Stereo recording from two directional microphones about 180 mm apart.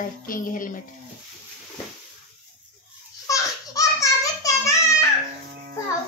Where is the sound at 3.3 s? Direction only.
20° left (ahead or behind).